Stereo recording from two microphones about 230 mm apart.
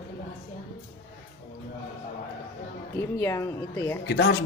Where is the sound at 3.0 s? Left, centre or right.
Centre.